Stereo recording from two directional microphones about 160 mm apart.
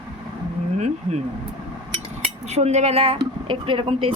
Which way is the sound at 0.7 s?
45° right (ahead or behind).